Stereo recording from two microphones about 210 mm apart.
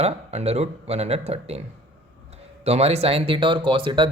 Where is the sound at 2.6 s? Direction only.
30° right (ahead or behind).